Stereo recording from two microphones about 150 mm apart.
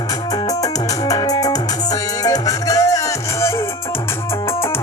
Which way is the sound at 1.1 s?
25° left (ahead or behind).